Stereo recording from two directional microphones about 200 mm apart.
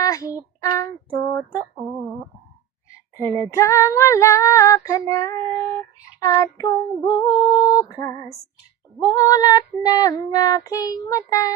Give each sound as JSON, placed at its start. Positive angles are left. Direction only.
{"t": 0.0, "sound": "child singing", "side_deg": 15}
{"t": 3.2, "sound": "female singing", "side_deg": 15}